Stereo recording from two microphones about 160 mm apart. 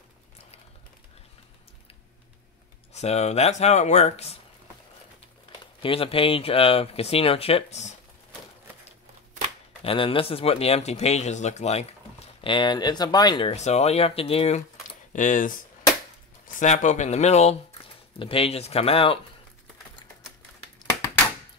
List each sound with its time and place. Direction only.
2.9 s speech: 45° left (ahead or behind)
5.8 s speech: 35° left (ahead or behind)
9.8 s speech: 35° left (ahead or behind)
12.4 s speech: 30° left (ahead or behind)
13.6 s speech: 45° left (ahead or behind)
15.1 s speech: 55° left (ahead or behind); by 19.1 s 35° left (ahead or behind)
20.8 s typewriter: 25° left (ahead or behind)